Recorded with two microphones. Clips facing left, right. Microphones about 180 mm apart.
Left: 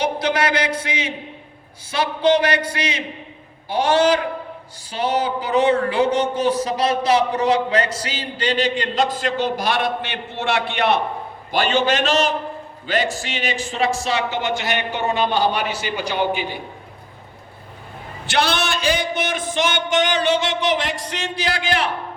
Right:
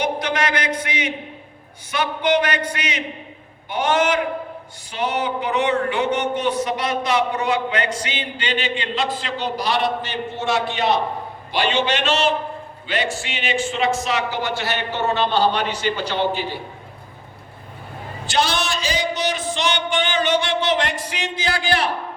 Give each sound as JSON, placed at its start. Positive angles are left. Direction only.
{"t": 0.2, "sound": "a man's voice", "side_deg": 30}
{"t": 11.5, "sound": "a man's voice", "side_deg": 45}
{"t": 18.3, "sound": "a man's voice", "side_deg": 60}
{"t": 20.4, "sound": "speech", "side_deg": 15}
{"t": 20.8, "sound": "a man's voice", "side_deg": -5}
{"t": 21.2, "sound": "a man's voice", "side_deg": -25}